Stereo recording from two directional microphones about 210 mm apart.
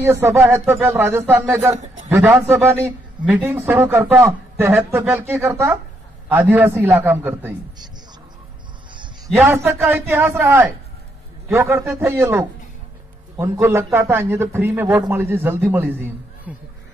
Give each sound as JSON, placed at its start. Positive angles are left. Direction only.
{"t": 0.0, "sound": "speech", "side_deg": -10}
{"t": 8.9, "sound": "a sound", "side_deg": -20}
{"t": 9.4, "sound": "speech", "side_deg": -10}